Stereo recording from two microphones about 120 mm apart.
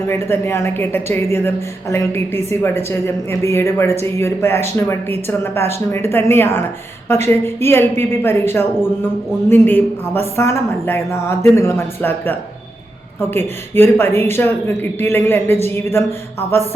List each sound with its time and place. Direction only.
0.1 s a woman's voice: 20° left (ahead or behind)